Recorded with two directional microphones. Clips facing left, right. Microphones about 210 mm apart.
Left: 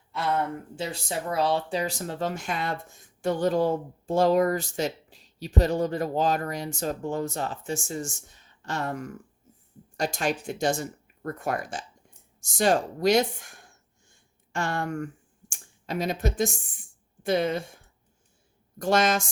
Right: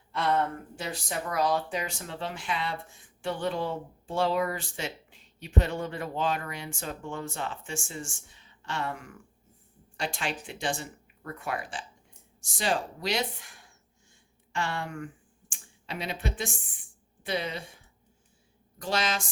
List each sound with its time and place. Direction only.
0.1 s speech: 5° left (ahead or behind)
0.8 s speech: 25° left (ahead or behind); by 17.7 s 45° left (ahead or behind)
18.8 s speech: 45° left (ahead or behind)